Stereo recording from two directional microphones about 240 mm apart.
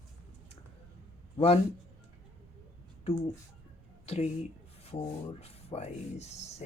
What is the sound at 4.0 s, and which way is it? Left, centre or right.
Speech, left.